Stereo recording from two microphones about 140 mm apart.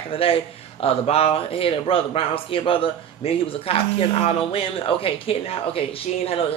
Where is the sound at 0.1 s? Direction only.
40° left (ahead or behind).